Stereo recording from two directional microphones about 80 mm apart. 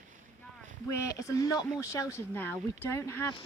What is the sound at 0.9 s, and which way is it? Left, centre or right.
Speech, left.